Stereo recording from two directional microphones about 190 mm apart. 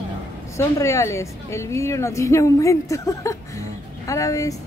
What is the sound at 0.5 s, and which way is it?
A woman's voice, 15° left (ahead or behind).